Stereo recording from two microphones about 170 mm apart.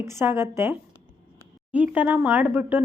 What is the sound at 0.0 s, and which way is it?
A woman's voice, 15° right (ahead or behind).